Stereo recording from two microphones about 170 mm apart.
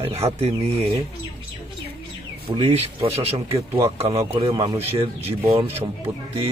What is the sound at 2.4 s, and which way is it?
Speech, 35° right (ahead or behind).